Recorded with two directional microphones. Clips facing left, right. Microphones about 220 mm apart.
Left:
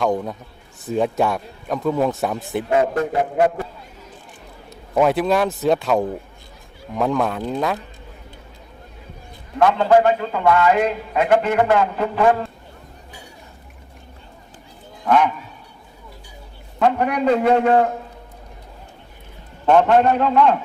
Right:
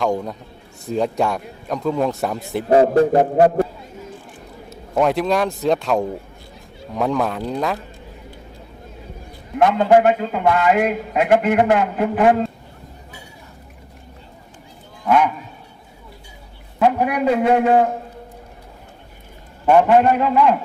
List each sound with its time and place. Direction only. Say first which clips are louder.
0.0 s a man's voice: even; centre (ahead or behind)
2.6 s a sound: right 6 dB; 35° right (ahead or behind)
4.7 s a man's voice: left 1 dB; centre (ahead or behind)
9.6 s a man's voice: right 1 dB; 20° right (ahead or behind)
15.0 s speech: even; 10° right (ahead or behind)
16.8 s a man's voice: right 1 dB; 5° right (ahead or behind)
19.6 s a man's voice: right 1 dB; 10° right (ahead or behind)